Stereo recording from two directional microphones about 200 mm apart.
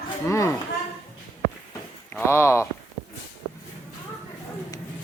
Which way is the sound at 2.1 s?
10° left (ahead or behind).